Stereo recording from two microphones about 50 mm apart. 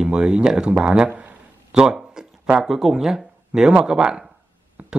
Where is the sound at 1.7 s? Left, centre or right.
Centre.